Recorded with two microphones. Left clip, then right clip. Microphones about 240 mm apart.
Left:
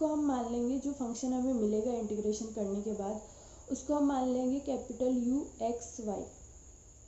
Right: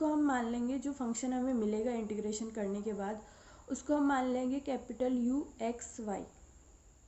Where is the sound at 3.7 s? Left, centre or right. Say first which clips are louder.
Even; right.